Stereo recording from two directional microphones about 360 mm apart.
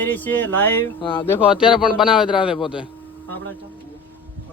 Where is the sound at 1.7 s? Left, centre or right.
Centre.